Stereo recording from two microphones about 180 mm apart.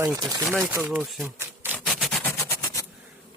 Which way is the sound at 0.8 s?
5° right (ahead or behind).